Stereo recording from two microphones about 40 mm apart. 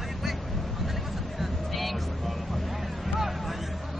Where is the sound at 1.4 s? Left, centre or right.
Centre.